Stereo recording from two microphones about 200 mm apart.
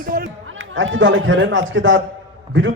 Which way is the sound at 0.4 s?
75° right (ahead or behind).